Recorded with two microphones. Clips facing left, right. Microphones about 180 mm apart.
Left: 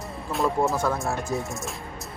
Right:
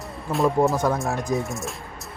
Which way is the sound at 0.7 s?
15° right (ahead or behind).